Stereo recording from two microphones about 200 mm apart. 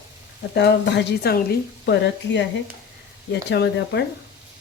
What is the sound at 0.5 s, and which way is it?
A woman's voice, 55° left (ahead or behind).